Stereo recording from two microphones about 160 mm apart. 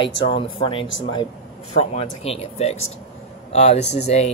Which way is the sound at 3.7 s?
90° left.